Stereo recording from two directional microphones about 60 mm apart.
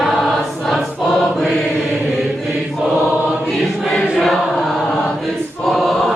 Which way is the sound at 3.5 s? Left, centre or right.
Centre.